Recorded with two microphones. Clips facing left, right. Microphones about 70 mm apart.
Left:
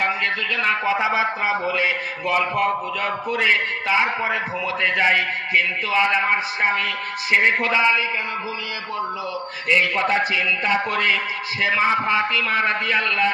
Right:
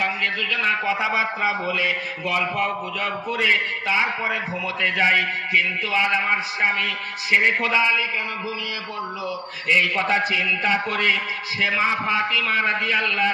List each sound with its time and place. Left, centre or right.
0.5 s a man's voice: left
0.9 s speech: left
1.1 s a man's voice: left
3.4 s a man's voice: left
9.6 s a man's voice: left